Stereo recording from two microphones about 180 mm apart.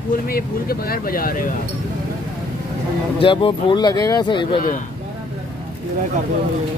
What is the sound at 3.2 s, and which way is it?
Speech, 30° left (ahead or behind).